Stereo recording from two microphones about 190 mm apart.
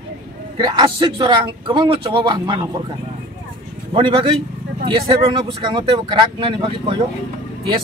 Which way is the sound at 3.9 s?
25° right (ahead or behind).